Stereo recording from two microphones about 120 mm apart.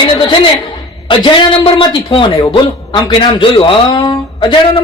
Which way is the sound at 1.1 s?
50° left (ahead or behind).